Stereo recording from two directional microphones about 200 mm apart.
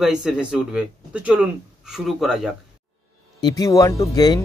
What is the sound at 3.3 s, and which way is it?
Speech, 20° left (ahead or behind).